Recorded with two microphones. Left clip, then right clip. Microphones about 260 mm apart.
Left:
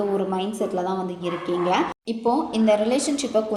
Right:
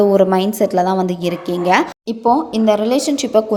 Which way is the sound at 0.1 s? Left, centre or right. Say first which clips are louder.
Right 12 dB; right.